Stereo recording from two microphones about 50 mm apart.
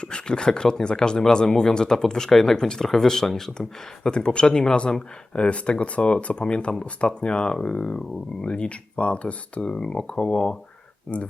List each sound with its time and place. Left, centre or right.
0.0 s speech: centre
4.1 s speech: centre